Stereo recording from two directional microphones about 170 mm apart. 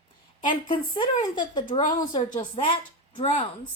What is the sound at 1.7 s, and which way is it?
Speech, 50° left (ahead or behind).